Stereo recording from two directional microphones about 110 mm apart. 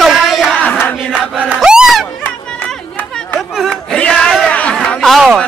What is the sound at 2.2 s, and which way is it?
Chatter, 15° left (ahead or behind).